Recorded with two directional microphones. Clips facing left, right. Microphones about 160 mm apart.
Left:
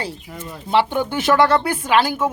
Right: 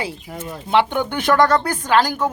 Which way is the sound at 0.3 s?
50° right (ahead or behind).